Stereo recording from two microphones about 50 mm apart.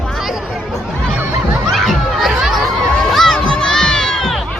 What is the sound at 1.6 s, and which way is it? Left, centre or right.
Crowd, centre.